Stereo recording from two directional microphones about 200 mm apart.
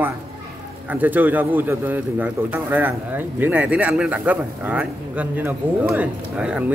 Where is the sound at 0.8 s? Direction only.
10° right (ahead or behind).